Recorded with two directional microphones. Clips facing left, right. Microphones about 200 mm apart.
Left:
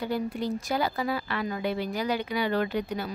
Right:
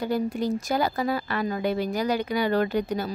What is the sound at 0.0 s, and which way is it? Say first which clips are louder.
Speech: right 4 dB; 45° right (ahead or behind).